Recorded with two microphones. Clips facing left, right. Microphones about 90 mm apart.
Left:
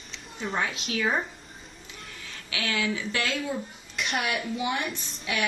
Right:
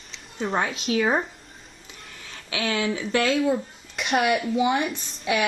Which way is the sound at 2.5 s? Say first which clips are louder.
Right 4 dB; 25° right (ahead or behind).